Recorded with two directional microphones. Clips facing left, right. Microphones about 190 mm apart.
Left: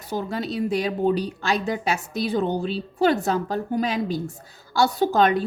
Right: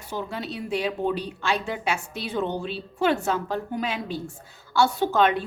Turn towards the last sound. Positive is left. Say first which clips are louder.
# left 2 dB
turn(degrees=40)  # may be behind; listen again after turning